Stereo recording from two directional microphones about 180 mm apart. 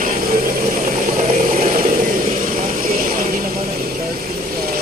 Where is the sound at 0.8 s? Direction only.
50° right (ahead or behind).